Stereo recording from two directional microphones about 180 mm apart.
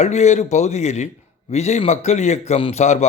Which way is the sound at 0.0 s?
40° left (ahead or behind).